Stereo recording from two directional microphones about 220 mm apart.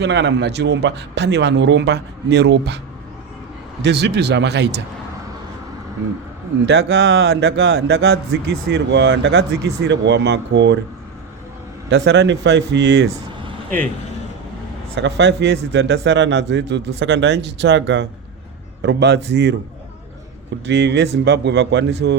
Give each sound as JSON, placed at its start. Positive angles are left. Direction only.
{"t": 0.0, "sound": "a man's voice", "side_deg": -50}
{"t": 3.8, "sound": "a man's voice", "side_deg": -50}
{"t": 6.7, "sound": "a man's voice", "side_deg": -55}
{"t": 11.9, "sound": "a man's voice", "side_deg": -50}
{"t": 14.9, "sound": "a man's voice", "side_deg": -55}
{"t": 20.7, "sound": "a man's voice", "side_deg": -50}